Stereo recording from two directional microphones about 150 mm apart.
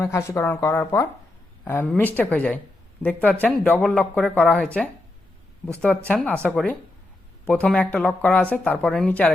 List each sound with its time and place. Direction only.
0.0 s speech: 15° left (ahead or behind)